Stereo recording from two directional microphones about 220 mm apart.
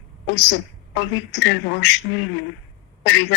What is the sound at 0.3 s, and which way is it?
A woman's voice, 55° left (ahead or behind).